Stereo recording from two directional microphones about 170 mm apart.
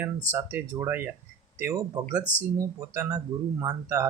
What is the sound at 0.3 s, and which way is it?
Speech, 15° right (ahead or behind).